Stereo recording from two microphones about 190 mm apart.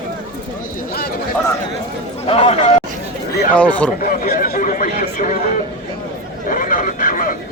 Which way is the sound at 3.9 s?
50° left (ahead or behind).